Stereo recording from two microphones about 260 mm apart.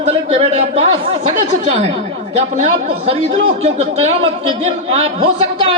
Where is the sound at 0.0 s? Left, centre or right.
Right.